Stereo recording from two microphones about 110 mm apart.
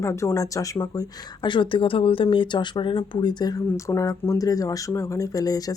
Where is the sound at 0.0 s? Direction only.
25° left (ahead or behind).